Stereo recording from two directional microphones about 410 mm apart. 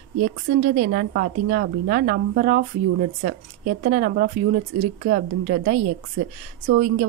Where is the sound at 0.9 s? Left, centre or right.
Right.